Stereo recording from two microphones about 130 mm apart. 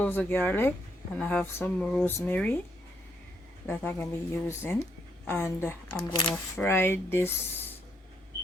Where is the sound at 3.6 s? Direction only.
15° left (ahead or behind).